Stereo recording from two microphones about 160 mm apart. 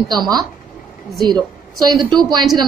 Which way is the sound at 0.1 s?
25° right (ahead or behind).